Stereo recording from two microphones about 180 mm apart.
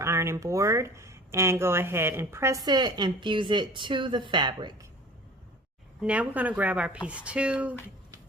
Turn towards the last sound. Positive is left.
turn(degrees=-5)  # may be behind; listen again after turning